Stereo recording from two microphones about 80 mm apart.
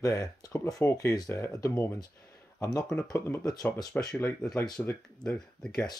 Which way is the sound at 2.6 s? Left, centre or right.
Left.